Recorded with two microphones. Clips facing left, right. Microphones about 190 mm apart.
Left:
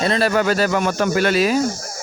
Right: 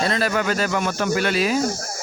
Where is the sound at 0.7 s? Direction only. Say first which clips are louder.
Left 3 dB; 50° left (ahead or behind).